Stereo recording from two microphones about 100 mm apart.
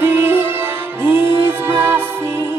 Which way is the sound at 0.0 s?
20° right (ahead or behind).